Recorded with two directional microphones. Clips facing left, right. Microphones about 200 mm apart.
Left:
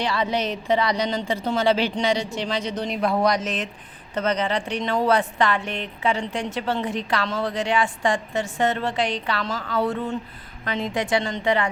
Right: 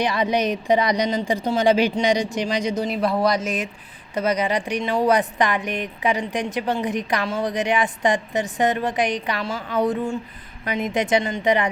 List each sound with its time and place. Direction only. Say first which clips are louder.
0.0 s a woman's voice: right 3 dB; 15° right (ahead or behind)